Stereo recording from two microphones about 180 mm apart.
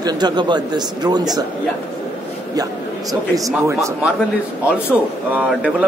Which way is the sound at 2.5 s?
20° right (ahead or behind).